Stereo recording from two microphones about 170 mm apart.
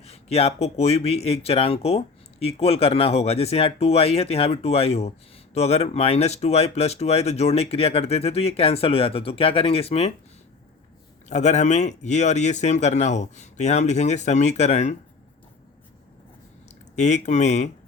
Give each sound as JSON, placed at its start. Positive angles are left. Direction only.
{"t": 0.0, "sound": "speech", "side_deg": 35}
{"t": 11.3, "sound": "speech", "side_deg": 45}
{"t": 16.9, "sound": "speech", "side_deg": 45}